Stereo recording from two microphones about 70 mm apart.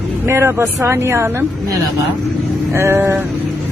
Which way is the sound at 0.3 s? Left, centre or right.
Right.